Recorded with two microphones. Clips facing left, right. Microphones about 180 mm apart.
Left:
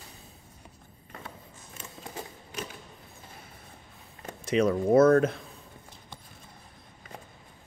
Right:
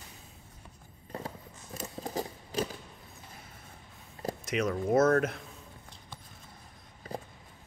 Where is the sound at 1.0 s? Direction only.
35° right (ahead or behind).